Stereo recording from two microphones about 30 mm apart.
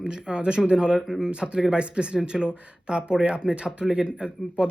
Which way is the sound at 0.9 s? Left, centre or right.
Centre.